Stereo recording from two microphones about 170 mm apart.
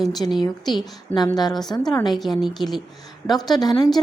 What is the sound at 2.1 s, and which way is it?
A woman's voice, centre (ahead or behind).